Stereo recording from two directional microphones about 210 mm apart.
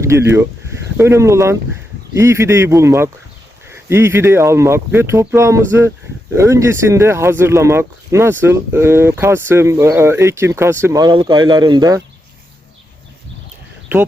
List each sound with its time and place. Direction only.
0.0 s speech: 15° right (ahead or behind)